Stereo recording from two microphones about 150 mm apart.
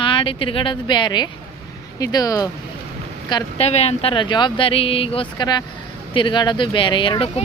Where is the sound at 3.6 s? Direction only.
45° left (ahead or behind).